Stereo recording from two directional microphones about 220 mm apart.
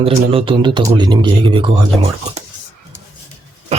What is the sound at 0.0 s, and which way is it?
Speech, 25° right (ahead or behind).